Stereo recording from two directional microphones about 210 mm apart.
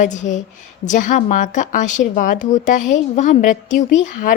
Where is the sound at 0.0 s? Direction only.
35° left (ahead or behind).